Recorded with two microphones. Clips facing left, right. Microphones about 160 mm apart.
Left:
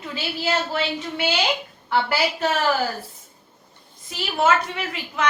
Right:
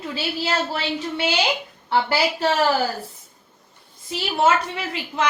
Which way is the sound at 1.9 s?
30° right (ahead or behind).